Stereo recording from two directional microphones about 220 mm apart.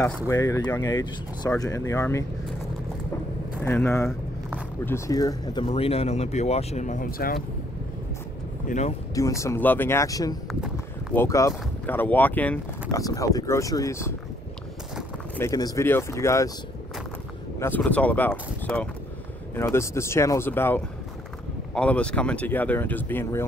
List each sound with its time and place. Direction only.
0.0 s speech: 15° left (ahead or behind)
3.5 s speech: 10° left (ahead or behind); by 7.3 s 40° left (ahead or behind)
8.6 s speech: 30° left (ahead or behind)
9.1 s speech: 15° left (ahead or behind)
10.5 s a sound: 5° right (ahead or behind)
11.1 s speech: 15° left (ahead or behind)
15.3 s speech: 15° left (ahead or behind)
17.6 s speech: 10° left (ahead or behind)